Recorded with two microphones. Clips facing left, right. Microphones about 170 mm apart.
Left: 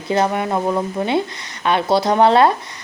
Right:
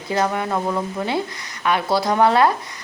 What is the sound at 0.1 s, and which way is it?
Speech, 20° left (ahead or behind).